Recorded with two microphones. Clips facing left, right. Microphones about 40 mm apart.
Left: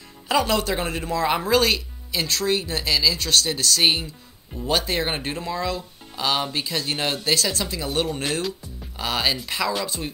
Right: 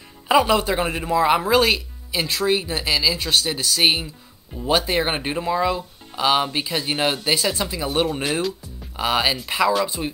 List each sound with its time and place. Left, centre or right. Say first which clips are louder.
0.3 s speech: right 4 dB; centre
8.1 s speech: right 3 dB; centre